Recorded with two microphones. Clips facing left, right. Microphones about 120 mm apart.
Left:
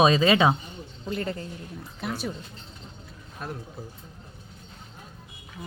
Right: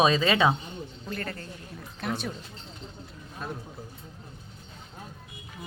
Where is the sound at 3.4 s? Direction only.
5° left (ahead or behind).